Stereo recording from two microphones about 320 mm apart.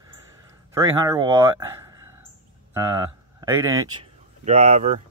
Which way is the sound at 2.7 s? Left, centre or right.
Centre.